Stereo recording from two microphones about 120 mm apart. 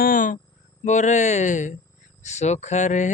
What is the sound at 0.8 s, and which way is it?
Speech, 85° left.